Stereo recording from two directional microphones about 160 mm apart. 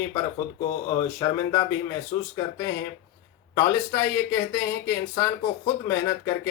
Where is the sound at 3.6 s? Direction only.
15° left (ahead or behind).